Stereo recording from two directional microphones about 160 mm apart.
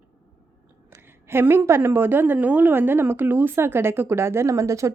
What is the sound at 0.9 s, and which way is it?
A woman's voice, 15° right (ahead or behind).